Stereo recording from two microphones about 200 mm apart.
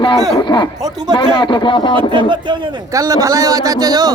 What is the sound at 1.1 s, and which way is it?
Speech, 25° left (ahead or behind).